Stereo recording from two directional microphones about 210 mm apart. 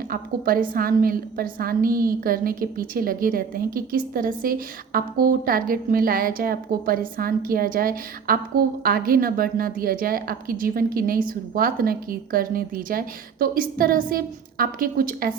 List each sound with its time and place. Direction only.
0.1 s a woman's voice: 45° right (ahead or behind)